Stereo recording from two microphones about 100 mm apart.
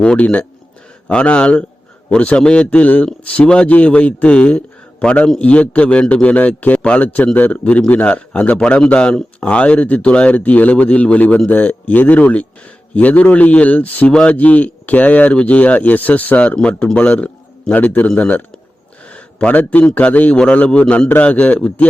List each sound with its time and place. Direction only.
0.0 s speech: 10° left (ahead or behind)